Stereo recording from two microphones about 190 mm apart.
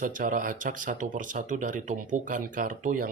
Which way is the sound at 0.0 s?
45° right (ahead or behind).